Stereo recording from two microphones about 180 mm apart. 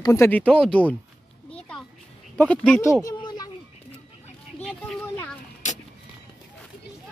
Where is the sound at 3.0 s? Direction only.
20° left (ahead or behind).